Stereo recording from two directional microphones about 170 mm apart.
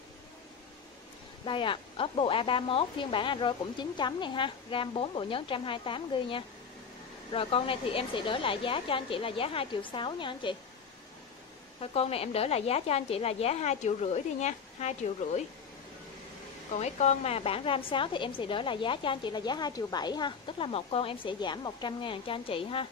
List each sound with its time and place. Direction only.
1.4 s a woman's voice: 30° left (ahead or behind)
11.8 s a woman's voice: 35° left (ahead or behind)
16.7 s a woman's voice: 40° left (ahead or behind)